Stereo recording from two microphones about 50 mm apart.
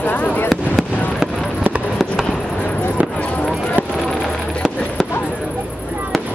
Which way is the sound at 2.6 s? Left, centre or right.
Left.